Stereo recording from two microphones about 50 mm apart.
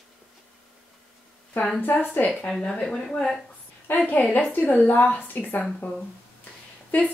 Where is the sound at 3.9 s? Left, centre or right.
Left.